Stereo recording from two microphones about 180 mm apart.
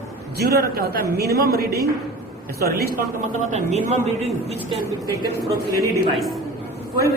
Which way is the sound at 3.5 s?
40° right (ahead or behind).